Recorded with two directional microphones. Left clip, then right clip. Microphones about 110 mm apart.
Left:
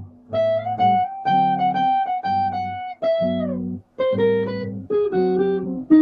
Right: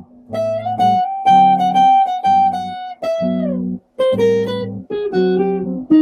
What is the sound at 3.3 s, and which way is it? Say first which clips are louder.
Music: right 3 dB; 25° right (ahead or behind).